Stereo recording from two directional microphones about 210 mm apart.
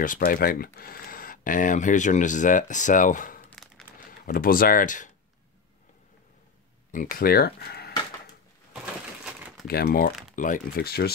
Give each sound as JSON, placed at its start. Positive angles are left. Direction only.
{"t": 0.0, "sound": "speech", "side_deg": 40}
{"t": 3.4, "sound": "crumpling", "side_deg": 5}
{"t": 4.3, "sound": "speech", "side_deg": 45}
{"t": 6.9, "sound": "speech", "side_deg": 40}
{"t": 9.2, "sound": "a sound", "side_deg": -5}
{"t": 9.7, "sound": "speech", "side_deg": 45}